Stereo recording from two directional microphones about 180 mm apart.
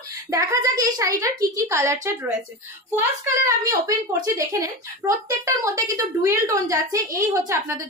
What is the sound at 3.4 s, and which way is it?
A woman's voice, 20° right (ahead or behind).